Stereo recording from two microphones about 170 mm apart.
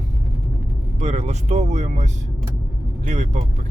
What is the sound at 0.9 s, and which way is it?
Speech, 40° right (ahead or behind).